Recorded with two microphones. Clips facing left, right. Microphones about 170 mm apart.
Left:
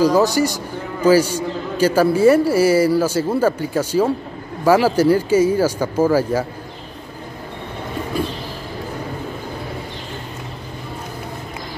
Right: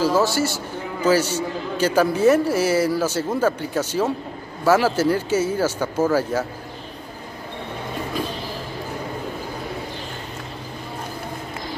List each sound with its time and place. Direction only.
0.0 s a man's voice: 15° left (ahead or behind)